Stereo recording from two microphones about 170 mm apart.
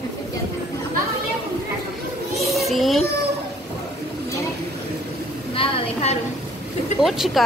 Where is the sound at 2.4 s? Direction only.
Centre (ahead or behind).